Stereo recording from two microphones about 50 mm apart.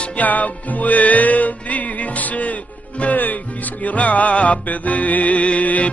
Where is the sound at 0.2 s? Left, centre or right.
Left.